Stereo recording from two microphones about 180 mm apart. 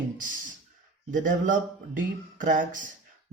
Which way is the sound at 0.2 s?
45° right (ahead or behind).